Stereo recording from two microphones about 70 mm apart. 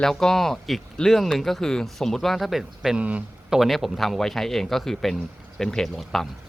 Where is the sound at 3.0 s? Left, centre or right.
Centre.